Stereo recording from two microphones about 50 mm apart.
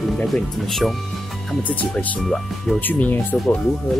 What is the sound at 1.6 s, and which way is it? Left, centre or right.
Speech, left.